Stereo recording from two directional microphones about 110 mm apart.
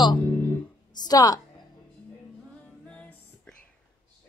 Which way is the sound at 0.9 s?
40° left (ahead or behind).